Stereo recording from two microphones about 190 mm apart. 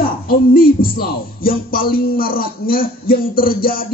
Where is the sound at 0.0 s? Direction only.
50° left (ahead or behind).